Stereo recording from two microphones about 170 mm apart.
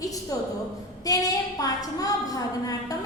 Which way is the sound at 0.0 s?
20° left (ahead or behind).